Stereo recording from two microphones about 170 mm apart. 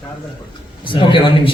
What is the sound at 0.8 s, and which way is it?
Speech, 30° left (ahead or behind).